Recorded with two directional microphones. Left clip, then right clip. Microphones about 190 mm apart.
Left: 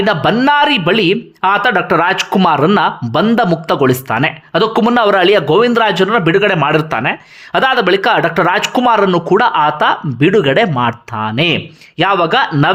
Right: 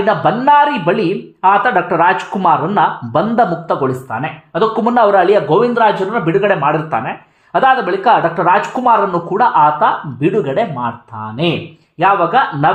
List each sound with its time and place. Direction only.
0.0 s speech: 15° left (ahead or behind)